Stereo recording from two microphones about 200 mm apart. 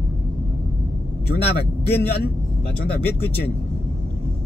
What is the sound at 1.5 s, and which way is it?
Speech, 55° left (ahead or behind).